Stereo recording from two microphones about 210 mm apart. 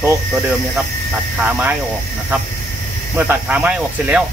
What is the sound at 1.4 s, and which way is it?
Speech, 10° right (ahead or behind).